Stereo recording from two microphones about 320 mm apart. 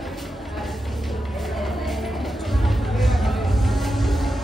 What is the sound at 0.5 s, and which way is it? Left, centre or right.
Music, centre.